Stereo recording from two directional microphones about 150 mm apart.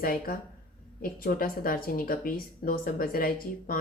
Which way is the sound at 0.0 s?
75° left (ahead or behind).